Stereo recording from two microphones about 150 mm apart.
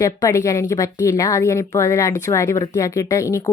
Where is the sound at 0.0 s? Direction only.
25° left (ahead or behind).